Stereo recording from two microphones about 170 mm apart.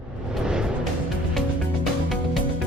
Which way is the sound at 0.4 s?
5° right (ahead or behind).